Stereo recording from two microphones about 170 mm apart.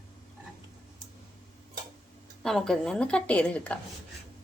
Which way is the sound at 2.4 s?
Centre (ahead or behind).